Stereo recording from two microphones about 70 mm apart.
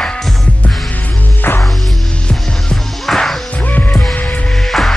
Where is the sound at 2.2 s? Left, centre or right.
Centre.